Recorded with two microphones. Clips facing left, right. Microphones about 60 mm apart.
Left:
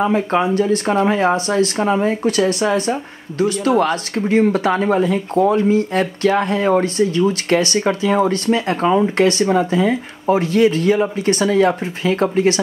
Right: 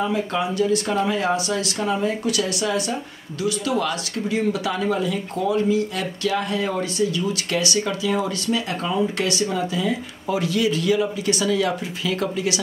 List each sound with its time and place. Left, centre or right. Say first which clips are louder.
0.0 s speech: left 6 dB; left